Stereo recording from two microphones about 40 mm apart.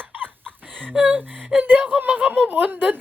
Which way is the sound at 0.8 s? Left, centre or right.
Right.